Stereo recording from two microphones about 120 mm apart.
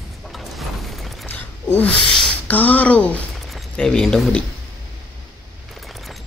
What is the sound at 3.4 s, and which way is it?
Speech, centre (ahead or behind).